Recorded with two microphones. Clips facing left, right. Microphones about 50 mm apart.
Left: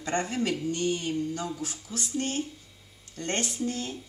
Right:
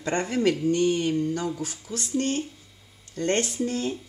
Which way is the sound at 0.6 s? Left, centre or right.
Right.